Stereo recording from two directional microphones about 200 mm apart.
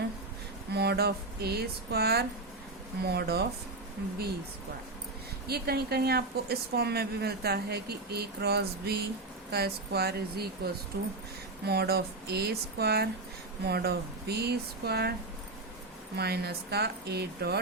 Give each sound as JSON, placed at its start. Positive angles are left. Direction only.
{"t": 0.7, "sound": "a woman's voice", "side_deg": -55}
{"t": 5.5, "sound": "a woman's voice", "side_deg": -50}
{"t": 16.1, "sound": "a woman's voice", "side_deg": -55}